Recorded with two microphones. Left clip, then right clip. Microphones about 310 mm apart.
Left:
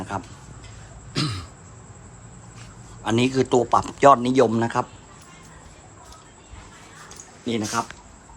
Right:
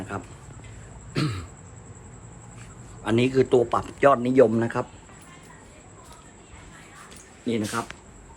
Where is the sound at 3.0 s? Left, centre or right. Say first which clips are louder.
Even; centre.